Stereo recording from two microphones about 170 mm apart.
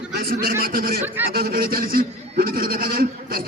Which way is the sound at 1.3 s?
60° right (ahead or behind).